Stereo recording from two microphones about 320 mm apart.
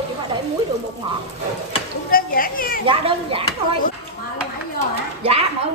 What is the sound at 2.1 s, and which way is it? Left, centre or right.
Speech, left.